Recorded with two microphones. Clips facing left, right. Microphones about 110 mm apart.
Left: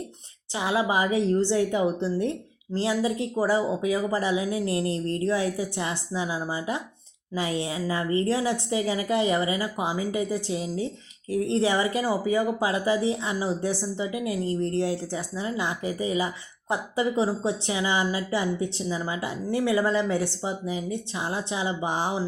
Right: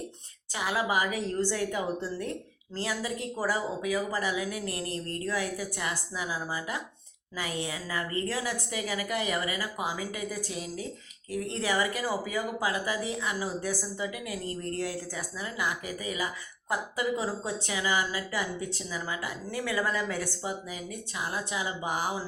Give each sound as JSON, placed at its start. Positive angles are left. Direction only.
{"t": 0.5, "sound": "speech", "side_deg": 25}